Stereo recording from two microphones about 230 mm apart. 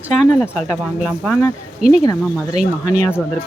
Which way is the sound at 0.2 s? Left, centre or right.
Centre.